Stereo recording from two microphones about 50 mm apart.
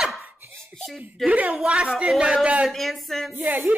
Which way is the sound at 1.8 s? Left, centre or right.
Centre.